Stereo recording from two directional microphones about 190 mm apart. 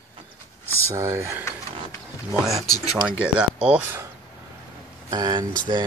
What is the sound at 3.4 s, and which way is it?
Speech, 5° right (ahead or behind).